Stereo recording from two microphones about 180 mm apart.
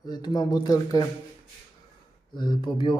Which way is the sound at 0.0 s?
20° left (ahead or behind).